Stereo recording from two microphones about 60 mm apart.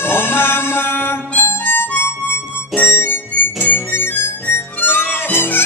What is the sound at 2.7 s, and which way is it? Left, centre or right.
Music, left.